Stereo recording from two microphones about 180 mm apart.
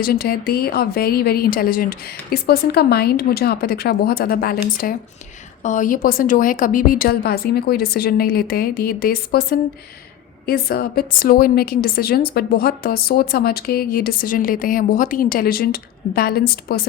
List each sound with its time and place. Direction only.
0.0 s a woman's voice: 60° left (ahead or behind)